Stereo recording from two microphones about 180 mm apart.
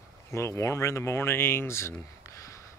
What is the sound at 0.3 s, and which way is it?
Speech, 15° left (ahead or behind).